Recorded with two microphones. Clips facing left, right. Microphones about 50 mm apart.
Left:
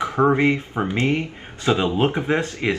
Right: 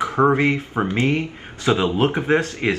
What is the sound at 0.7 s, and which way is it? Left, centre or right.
Speech, centre.